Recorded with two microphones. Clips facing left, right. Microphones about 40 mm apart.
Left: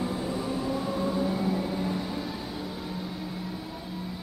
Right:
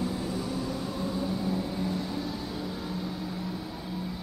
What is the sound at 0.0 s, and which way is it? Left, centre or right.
Vehicle, centre.